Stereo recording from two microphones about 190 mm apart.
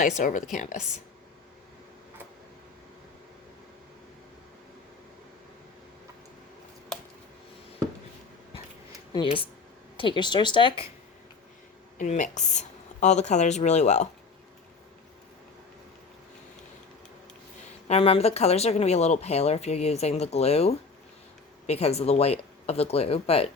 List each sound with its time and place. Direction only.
0.2 s a woman's voice: 45° left (ahead or behind)
9.1 s a woman's voice: 25° left (ahead or behind)
11.9 s speech: 40° left (ahead or behind)
17.8 s speech: 30° left (ahead or behind)